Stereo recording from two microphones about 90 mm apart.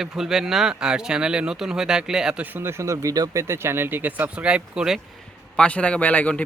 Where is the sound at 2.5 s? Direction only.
30° right (ahead or behind); by 5.0 s 10° right (ahead or behind).